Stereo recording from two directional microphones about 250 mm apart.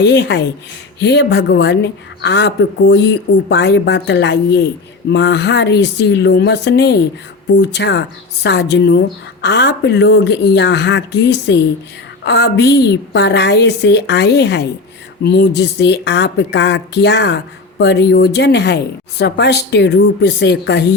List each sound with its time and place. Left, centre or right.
0.0 s speech: left